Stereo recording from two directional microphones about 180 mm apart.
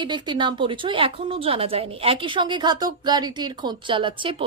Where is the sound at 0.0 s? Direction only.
25° right (ahead or behind).